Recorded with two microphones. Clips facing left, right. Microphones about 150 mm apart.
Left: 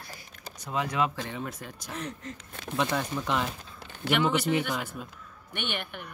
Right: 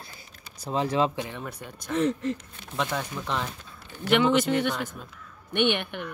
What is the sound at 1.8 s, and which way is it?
Speech, 85° right.